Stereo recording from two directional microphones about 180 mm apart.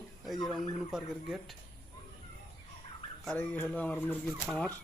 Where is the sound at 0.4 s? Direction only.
Centre (ahead or behind).